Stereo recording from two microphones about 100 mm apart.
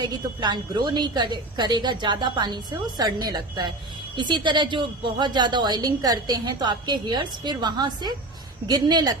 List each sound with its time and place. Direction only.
0.3 s a woman's voice: 45° right (ahead or behind)